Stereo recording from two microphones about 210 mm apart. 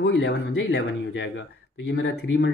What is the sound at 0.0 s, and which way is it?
Speech, 55° left (ahead or behind).